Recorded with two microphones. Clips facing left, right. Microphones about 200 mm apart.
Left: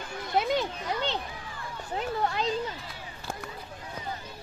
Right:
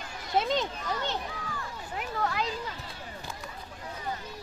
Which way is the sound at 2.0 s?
30° left (ahead or behind).